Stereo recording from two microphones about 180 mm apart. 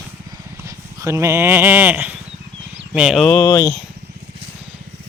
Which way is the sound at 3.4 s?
15° left (ahead or behind).